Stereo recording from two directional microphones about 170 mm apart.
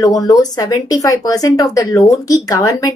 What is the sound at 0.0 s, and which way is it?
A woman's voice, 20° left (ahead or behind).